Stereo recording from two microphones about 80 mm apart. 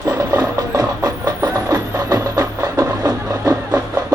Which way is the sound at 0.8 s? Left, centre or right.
Right.